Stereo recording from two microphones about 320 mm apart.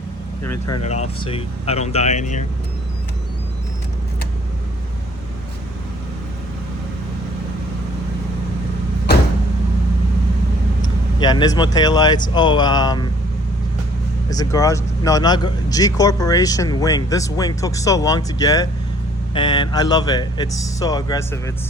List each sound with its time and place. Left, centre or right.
0.7 s speech: left
11.2 s speech: centre
14.3 s speech: centre